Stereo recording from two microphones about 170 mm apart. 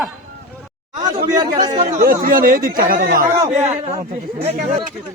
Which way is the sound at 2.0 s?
60° right (ahead or behind).